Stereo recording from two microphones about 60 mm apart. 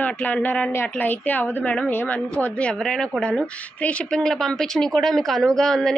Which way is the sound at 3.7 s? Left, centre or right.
Left.